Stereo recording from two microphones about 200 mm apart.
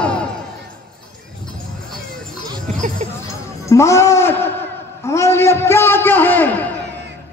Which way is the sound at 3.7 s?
15° left (ahead or behind).